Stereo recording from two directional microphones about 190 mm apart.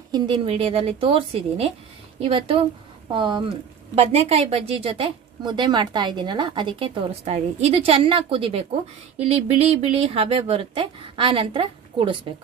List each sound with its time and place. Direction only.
0.1 s a woman's voice: 30° right (ahead or behind)